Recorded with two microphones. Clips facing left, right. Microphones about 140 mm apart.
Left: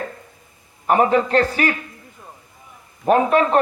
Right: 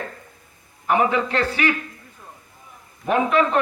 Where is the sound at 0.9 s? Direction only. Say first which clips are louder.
Left 4 dB; 40° left (ahead or behind).